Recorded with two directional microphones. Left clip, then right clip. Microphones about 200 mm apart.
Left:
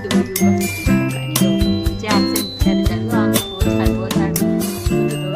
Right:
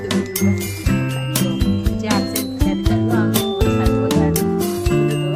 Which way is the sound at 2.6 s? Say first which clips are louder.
Right 2 dB; 5° left (ahead or behind).